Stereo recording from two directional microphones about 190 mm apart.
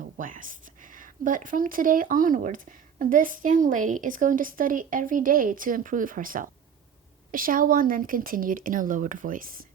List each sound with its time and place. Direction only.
0.0 s speech: 45° right (ahead or behind)